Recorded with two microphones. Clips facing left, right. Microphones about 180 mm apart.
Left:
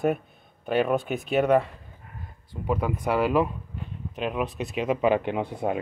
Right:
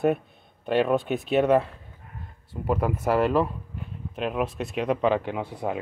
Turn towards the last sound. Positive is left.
turn(degrees=20)  # may be behind; listen again after turning